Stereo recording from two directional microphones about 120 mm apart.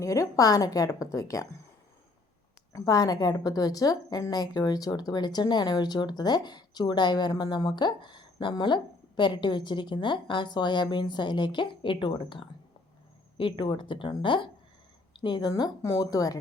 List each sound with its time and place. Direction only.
0.0 s a woman's voice: 25° left (ahead or behind)
2.7 s a woman's voice: 30° left (ahead or behind)